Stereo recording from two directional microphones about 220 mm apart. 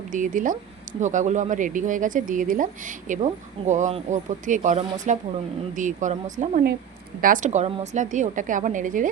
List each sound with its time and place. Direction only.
0.1 s speech: 35° right (ahead or behind)